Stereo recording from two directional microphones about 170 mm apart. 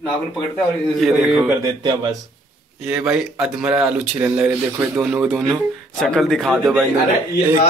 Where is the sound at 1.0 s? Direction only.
Centre (ahead or behind).